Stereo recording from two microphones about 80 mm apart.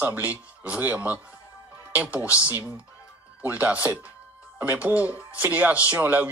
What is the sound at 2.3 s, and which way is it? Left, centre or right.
Speech, left.